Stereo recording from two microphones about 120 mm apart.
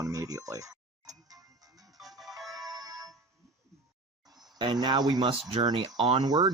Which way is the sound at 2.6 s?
30° right (ahead or behind).